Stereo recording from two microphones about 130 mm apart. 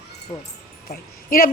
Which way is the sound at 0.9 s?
90° left.